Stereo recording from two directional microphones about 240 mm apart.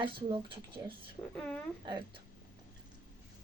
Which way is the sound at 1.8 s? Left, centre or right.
Centre.